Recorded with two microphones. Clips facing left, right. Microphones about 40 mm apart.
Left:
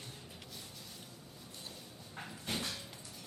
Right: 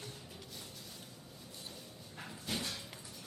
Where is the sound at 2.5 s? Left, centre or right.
Left.